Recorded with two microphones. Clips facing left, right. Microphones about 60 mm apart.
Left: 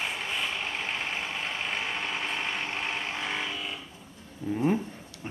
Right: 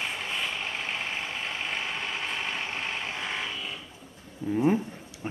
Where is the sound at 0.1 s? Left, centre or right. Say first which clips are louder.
Even; centre.